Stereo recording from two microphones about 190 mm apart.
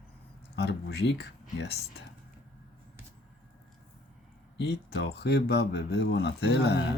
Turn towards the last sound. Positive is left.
turn(degrees=60)  # may be behind; listen again after turning